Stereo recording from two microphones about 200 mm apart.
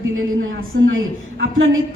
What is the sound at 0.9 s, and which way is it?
Speech, 80° right.